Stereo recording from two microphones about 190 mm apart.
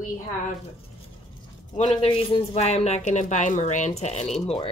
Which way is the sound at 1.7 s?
30° left (ahead or behind).